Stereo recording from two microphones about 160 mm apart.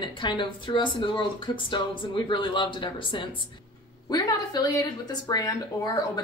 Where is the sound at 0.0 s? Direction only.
30° left (ahead or behind).